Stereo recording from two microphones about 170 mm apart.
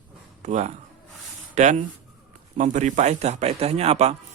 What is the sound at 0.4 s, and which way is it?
A man's voice, 45° right (ahead or behind).